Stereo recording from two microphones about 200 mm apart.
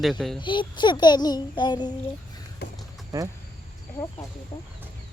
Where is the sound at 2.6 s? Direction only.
55° left (ahead or behind).